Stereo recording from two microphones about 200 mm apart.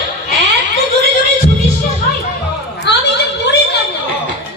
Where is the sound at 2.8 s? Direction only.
60° left (ahead or behind).